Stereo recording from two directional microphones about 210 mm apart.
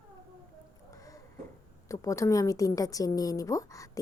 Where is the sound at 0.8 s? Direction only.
15° left (ahead or behind).